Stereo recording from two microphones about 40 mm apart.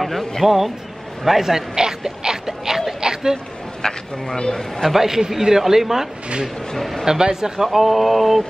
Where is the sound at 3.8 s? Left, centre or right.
Centre.